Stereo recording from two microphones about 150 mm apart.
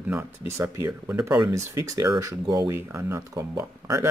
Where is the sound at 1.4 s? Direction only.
20° right (ahead or behind).